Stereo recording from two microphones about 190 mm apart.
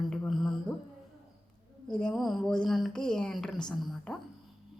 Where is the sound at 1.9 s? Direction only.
5° left (ahead or behind).